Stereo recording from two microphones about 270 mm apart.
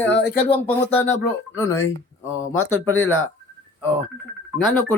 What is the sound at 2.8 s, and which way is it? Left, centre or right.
Speech, centre.